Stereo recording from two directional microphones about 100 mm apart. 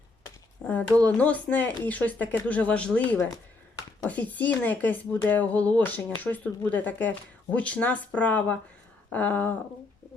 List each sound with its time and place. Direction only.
0.6 s speech: 15° left (ahead or behind)
4.0 s speech: 15° left (ahead or behind)